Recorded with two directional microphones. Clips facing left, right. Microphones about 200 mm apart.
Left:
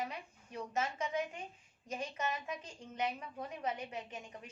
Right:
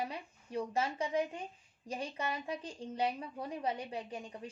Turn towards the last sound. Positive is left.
turn(degrees=-30)  # may be behind; listen again after turning